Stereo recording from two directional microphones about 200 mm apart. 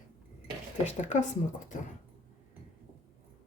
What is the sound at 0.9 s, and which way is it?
Speech, 35° left (ahead or behind).